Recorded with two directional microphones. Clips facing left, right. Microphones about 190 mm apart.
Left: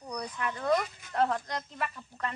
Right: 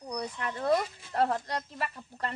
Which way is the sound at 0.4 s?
30° right (ahead or behind).